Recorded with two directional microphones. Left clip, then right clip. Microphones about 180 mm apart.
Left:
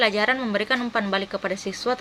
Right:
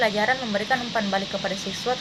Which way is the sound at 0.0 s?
20° left (ahead or behind).